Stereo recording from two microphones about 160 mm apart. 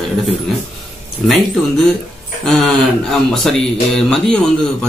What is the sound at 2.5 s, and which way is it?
A man's voice, centre (ahead or behind).